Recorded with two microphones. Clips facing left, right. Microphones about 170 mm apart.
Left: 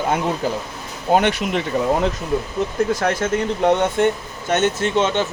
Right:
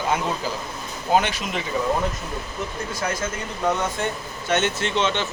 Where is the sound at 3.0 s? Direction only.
70° left (ahead or behind).